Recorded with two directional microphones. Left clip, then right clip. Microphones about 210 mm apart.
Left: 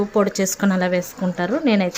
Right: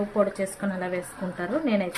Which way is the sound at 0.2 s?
50° left (ahead or behind).